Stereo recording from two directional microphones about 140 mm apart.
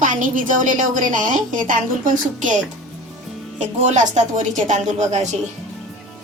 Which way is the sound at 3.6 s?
60° right (ahead or behind).